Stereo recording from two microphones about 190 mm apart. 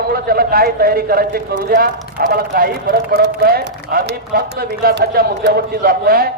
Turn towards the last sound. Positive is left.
turn(degrees=-50)  # may be behind; listen again after turning